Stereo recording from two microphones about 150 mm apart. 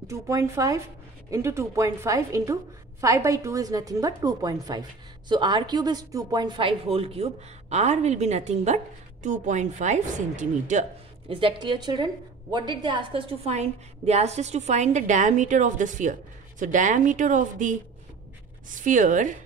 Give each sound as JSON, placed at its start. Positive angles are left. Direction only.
{"t": 0.0, "sound": "a woman's voice", "side_deg": -20}
{"t": 11.3, "sound": "a woman's voice", "side_deg": -35}
{"t": 18.8, "sound": "speech", "side_deg": -60}